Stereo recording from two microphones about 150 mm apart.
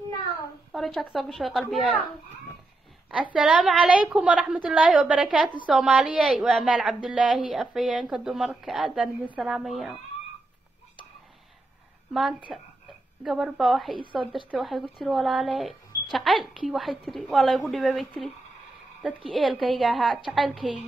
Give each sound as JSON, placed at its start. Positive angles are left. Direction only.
{"t": 0.7, "sound": "a woman's voice", "side_deg": 0}
{"t": 3.3, "sound": "a woman's voice", "side_deg": -5}
{"t": 12.1, "sound": "a woman's voice", "side_deg": 0}
{"t": 13.9, "sound": "a woman's voice", "side_deg": -35}
{"t": 14.3, "sound": "a woman's voice", "side_deg": 0}